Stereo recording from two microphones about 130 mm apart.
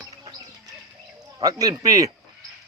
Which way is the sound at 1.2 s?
30° right (ahead or behind).